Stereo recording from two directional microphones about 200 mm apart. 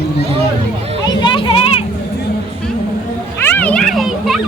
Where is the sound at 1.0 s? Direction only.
25° left (ahead or behind).